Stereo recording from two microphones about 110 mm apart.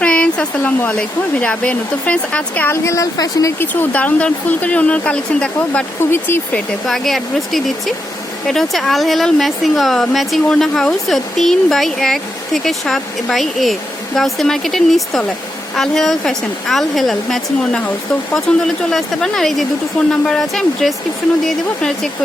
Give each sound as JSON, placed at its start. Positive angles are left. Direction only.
{"t": 0.0, "sound": "speech", "side_deg": 10}
{"t": 2.8, "sound": "speech", "side_deg": 30}
{"t": 3.6, "sound": "speech", "side_deg": 15}
{"t": 6.1, "sound": "speech", "side_deg": 20}
{"t": 6.8, "sound": "speech", "side_deg": 0}